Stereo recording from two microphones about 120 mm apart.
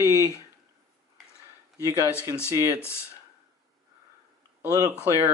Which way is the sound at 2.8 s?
20° left (ahead or behind).